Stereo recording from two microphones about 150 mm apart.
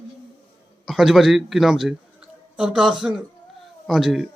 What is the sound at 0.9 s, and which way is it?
A man's voice, centre (ahead or behind).